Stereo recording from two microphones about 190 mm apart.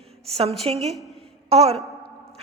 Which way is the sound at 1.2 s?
30° right (ahead or behind).